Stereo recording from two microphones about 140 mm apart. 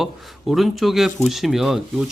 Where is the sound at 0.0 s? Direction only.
Centre (ahead or behind).